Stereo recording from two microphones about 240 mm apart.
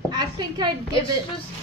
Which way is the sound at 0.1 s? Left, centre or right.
Centre.